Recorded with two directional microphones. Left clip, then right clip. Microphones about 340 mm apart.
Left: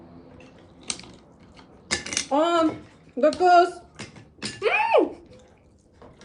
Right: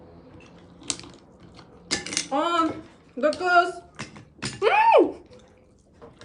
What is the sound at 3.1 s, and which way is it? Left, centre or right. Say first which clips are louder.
Speech: left 3 dB; centre.